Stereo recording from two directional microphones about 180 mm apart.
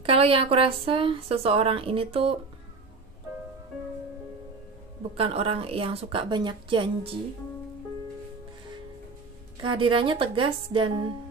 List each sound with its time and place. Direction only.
0.0 s speech: 30° right (ahead or behind)
5.1 s speech: 30° right (ahead or behind)
9.6 s a woman's voice: 30° right (ahead or behind)